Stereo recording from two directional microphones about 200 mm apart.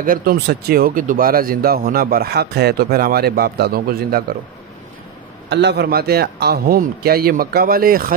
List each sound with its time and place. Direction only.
0.0 s speech: 45° right (ahead or behind)
5.5 s speech: 60° right (ahead or behind)